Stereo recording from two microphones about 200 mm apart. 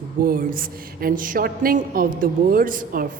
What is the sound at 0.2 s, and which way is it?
A woman's voice, 45° right (ahead or behind).